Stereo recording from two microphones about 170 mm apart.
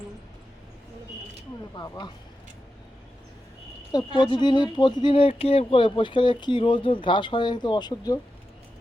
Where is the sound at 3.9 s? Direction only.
25° left (ahead or behind).